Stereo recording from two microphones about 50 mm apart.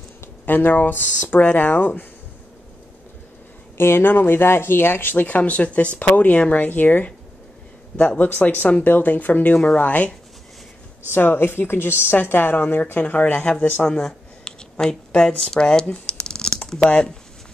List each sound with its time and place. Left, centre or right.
0.5 s speech: left
3.7 s speech: left
8.2 s speech: left
11.1 s a woman's voice: left
13.8 s speech: centre
15.9 s computer keyboard: centre